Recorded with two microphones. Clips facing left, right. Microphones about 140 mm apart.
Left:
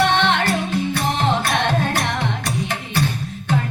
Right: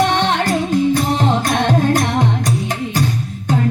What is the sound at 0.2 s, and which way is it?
Music, 40° right (ahead or behind).